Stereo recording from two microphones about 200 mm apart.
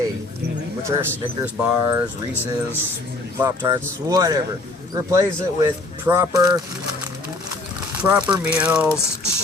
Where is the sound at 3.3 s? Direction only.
15° right (ahead or behind).